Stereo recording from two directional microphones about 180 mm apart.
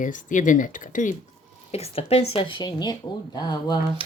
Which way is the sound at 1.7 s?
35° left (ahead or behind).